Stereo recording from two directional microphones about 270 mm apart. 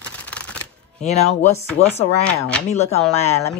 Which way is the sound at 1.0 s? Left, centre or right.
Left.